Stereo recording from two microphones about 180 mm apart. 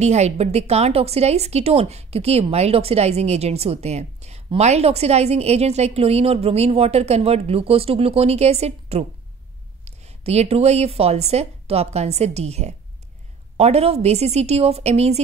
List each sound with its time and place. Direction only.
0.0 s a woman's voice: 40° right (ahead or behind)